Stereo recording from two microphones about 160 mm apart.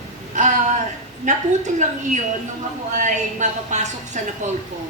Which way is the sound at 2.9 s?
50° right (ahead or behind).